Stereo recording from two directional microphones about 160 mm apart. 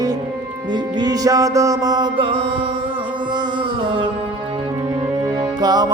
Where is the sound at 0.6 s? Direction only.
25° right (ahead or behind).